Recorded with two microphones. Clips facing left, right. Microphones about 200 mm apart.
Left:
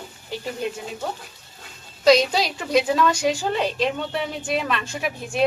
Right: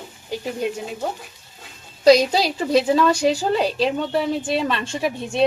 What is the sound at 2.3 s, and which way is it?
A woman's voice, 35° right (ahead or behind).